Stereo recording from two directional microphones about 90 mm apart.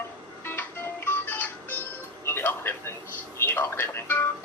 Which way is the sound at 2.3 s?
25° left (ahead or behind).